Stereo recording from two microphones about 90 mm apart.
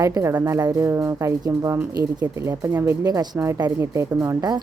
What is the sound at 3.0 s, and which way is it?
Speech, 45° right (ahead or behind).